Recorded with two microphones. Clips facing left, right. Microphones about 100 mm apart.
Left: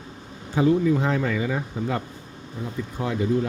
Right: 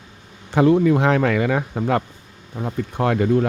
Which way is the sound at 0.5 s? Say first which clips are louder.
Right 5 dB; 65° right (ahead or behind).